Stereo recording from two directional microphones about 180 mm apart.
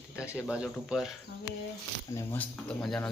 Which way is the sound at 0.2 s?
15° left (ahead or behind).